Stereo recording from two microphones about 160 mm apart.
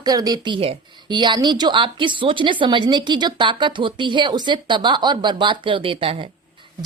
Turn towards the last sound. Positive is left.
turn(degrees=-35)  # may be behind; listen again after turning